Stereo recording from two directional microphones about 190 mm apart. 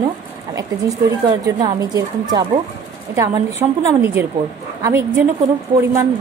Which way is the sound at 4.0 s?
10° right (ahead or behind).